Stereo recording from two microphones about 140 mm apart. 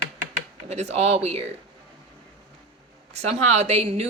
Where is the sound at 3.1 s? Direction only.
50° right (ahead or behind).